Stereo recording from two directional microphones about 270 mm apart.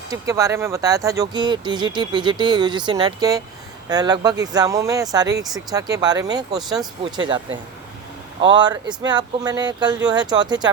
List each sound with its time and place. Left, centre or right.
0.1 s speech: centre